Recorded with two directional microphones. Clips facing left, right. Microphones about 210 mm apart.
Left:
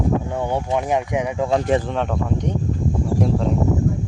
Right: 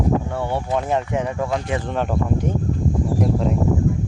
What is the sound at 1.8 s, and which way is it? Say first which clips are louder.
Speech: right 1 dB; centre (ahead or behind).